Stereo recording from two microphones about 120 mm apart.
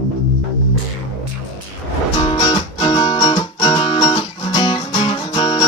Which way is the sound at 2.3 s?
45° left (ahead or behind).